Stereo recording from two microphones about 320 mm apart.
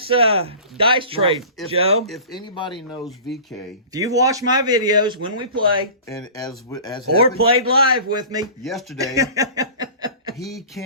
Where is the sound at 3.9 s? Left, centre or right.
Centre.